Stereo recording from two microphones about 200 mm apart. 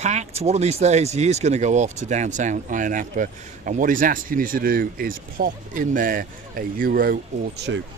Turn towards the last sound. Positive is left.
turn(degrees=-55)  # may be behind; listen again after turning